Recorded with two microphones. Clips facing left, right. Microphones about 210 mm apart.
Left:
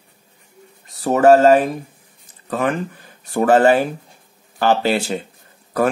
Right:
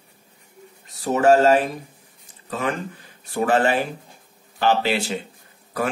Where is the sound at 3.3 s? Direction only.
50° left (ahead or behind).